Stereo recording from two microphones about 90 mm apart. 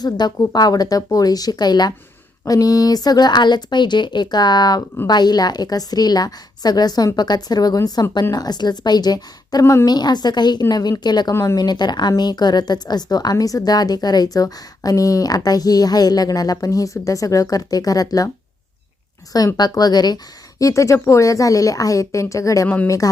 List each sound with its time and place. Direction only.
0.0 s speech: 50° left (ahead or behind)
19.5 s speech: 50° left (ahead or behind)
20.6 s a woman's voice: 40° left (ahead or behind)
22.6 s speech: 15° left (ahead or behind)